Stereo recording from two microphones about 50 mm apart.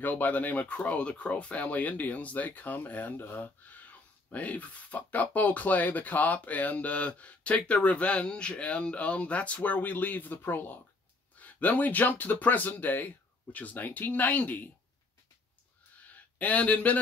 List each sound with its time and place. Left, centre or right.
0.0 s speech: left
11.3 s speech: left
16.0 s a sound: left